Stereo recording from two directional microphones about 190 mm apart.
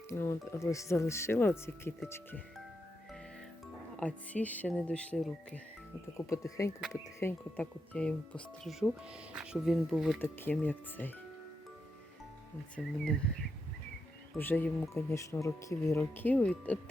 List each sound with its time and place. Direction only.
0.1 s speech: 15° left (ahead or behind)
4.0 s speech: 5° left (ahead or behind)
6.1 s speech: 15° left (ahead or behind)
9.3 s speech: 5° right (ahead or behind)
10.2 s speech: 10° left (ahead or behind)
12.8 s speech: centre (ahead or behind)
14.3 s speech: 10° left (ahead or behind)